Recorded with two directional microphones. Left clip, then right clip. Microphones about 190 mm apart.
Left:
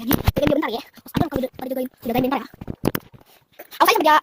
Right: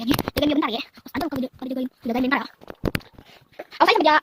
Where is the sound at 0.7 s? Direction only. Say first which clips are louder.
Left 1 dB; 35° right (ahead or behind).